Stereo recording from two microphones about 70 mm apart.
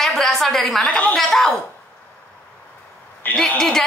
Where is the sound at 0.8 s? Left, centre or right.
Centre.